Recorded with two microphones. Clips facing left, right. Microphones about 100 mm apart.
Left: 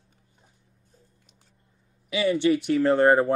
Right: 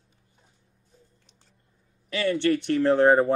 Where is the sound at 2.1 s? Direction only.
10° left (ahead or behind).